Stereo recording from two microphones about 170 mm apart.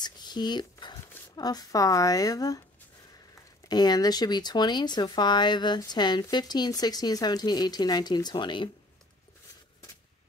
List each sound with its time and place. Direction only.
0.0 s a sound: 25° left (ahead or behind)
1.3 s speech: 20° left (ahead or behind)
3.6 s speech: 25° left (ahead or behind)